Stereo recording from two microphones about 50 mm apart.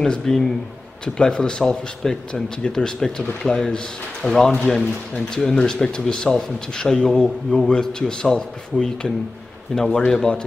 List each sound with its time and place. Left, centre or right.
0.0 s speech: centre